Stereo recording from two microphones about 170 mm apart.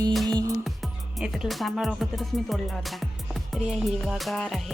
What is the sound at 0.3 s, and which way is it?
Music, 25° right (ahead or behind).